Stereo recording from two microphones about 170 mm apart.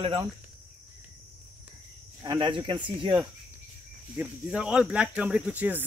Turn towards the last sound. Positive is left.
turn(degrees=-10)  # may be behind; listen again after turning